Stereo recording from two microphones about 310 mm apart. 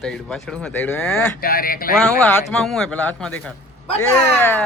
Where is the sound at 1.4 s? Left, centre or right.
Left.